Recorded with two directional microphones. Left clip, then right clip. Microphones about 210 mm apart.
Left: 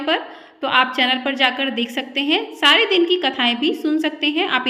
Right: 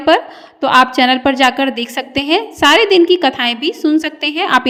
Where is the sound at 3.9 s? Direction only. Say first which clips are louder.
Right 4 dB; 45° right (ahead or behind).